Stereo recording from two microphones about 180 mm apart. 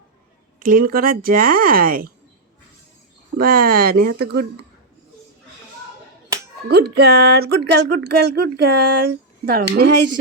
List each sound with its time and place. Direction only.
0.7 s speech: 55° right (ahead or behind)
3.3 s speech: 55° right (ahead or behind)
6.7 s speech: 60° right (ahead or behind)